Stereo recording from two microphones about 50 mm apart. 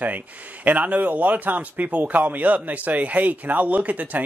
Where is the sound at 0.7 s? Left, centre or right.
Right.